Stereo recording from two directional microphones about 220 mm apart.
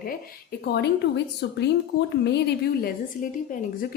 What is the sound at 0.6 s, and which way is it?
Speech, 50° left (ahead or behind).